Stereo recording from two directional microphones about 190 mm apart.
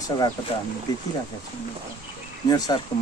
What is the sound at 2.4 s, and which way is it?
Speech, 20° left (ahead or behind).